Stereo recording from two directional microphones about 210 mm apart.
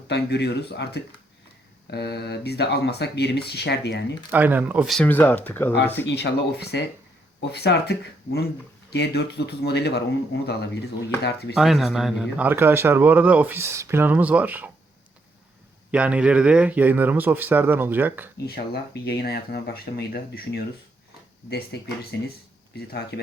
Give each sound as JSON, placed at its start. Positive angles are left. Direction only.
{"t": 0.1, "sound": "speech", "side_deg": 55}
{"t": 4.3, "sound": "speech", "side_deg": -10}
{"t": 6.1, "sound": "speech", "side_deg": 55}
{"t": 11.5, "sound": "speech", "side_deg": 0}
{"t": 15.9, "sound": "speech", "side_deg": -5}
{"t": 18.4, "sound": "speech", "side_deg": 50}
{"t": 21.7, "sound": "speech", "side_deg": 50}